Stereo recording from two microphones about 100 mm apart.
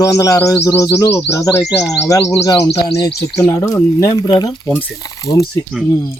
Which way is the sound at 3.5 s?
25° left (ahead or behind).